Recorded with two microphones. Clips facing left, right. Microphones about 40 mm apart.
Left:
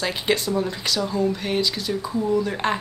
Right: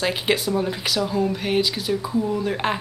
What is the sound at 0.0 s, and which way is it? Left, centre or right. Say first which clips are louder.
Speech: right 1 dB; centre.